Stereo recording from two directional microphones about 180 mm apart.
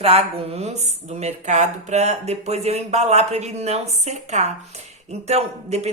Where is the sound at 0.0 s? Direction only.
35° right (ahead or behind).